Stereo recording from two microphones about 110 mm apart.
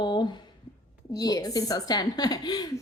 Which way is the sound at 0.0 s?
45° left (ahead or behind).